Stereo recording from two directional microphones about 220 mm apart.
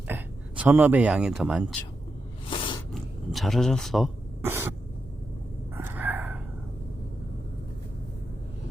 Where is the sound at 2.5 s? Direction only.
20° left (ahead or behind).